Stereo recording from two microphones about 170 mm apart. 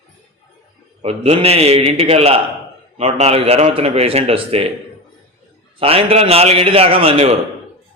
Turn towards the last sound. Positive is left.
turn(degrees=-35)  # may be behind; listen again after turning